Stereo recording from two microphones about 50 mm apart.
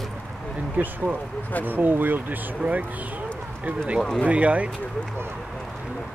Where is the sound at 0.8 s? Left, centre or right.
Right.